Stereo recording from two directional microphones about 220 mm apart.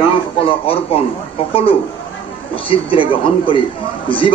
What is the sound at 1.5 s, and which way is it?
A man's voice, 25° left (ahead or behind).